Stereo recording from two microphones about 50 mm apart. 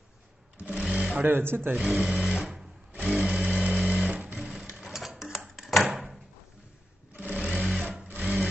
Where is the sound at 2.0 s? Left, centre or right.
Centre.